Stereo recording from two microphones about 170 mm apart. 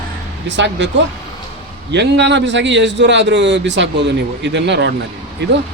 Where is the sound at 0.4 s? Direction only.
90° right.